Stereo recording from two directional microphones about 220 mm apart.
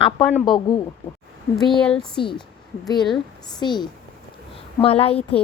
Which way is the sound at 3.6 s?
20° left (ahead or behind).